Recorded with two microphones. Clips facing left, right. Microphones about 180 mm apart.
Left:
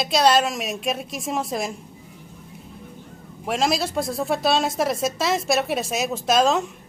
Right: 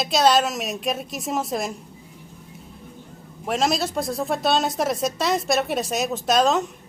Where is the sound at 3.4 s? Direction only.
Centre (ahead or behind).